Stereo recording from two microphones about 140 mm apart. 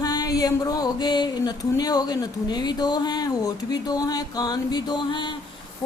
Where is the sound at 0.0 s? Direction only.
30° left (ahead or behind).